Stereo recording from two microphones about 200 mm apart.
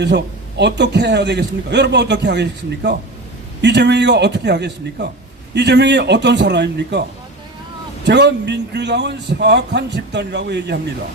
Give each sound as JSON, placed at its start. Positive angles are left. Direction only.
{"t": 0.0, "sound": "a man's voice", "side_deg": -60}
{"t": 8.0, "sound": "a man's voice", "side_deg": -60}